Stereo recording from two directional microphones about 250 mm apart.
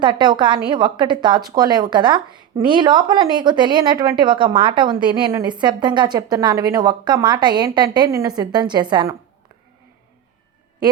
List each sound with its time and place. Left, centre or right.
0.0 s a woman's voice: centre